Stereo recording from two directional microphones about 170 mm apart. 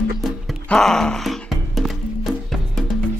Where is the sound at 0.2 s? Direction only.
Centre (ahead or behind).